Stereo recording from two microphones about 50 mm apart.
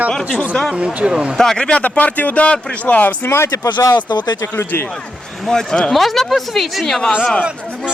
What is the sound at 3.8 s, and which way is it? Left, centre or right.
Speech, left.